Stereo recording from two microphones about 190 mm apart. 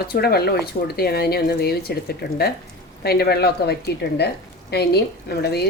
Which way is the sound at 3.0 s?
55° left (ahead or behind).